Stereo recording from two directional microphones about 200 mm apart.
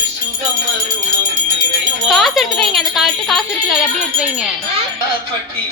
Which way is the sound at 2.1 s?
Centre (ahead or behind).